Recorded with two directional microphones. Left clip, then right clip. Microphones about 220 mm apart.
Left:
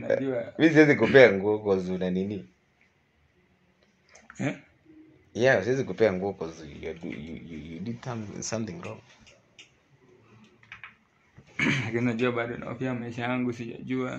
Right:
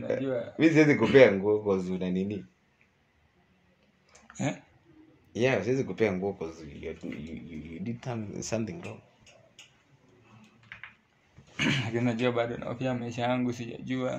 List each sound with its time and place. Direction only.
0.6 s a man's voice: centre (ahead or behind)
4.3 s a sound: 25° right (ahead or behind)
5.3 s a man's voice: 5° right (ahead or behind)
6.8 s speech: 10° left (ahead or behind)
7.8 s speech: 20° right (ahead or behind)
8.4 s speech: 30° right (ahead or behind)
11.5 s speech: 35° right (ahead or behind)